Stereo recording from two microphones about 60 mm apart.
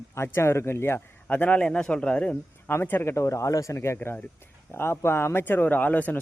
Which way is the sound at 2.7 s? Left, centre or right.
Left.